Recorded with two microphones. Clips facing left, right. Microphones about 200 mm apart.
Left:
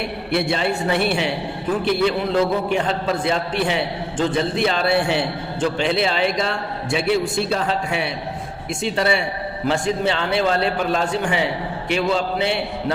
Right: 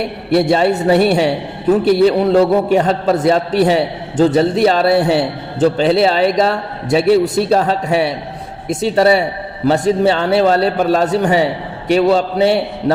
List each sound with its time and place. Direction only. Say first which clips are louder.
0.3 s a man's voice: right 9 dB; 40° right (ahead or behind)